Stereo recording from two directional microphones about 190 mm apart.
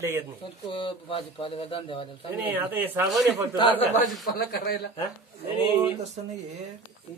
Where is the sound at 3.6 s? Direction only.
25° left (ahead or behind).